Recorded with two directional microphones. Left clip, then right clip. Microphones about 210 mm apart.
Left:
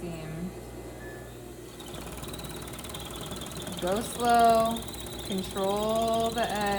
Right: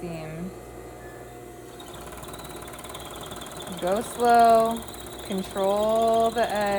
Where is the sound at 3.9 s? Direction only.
35° right (ahead or behind).